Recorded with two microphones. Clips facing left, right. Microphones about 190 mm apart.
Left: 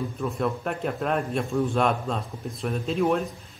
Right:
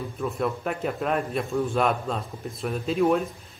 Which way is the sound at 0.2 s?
Centre (ahead or behind).